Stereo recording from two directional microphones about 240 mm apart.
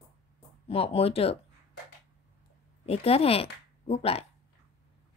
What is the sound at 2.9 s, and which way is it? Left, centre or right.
Speech, left.